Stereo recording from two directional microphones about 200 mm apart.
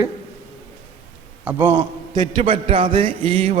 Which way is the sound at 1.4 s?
10° right (ahead or behind).